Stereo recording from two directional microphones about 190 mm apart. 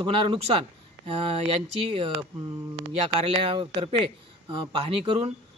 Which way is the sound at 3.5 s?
25° right (ahead or behind).